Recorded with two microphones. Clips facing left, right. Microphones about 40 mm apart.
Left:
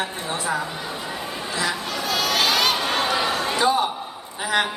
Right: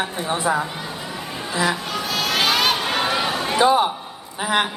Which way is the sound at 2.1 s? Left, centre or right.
Centre.